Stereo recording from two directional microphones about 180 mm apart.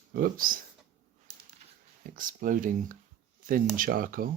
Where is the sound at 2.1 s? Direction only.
50° right (ahead or behind).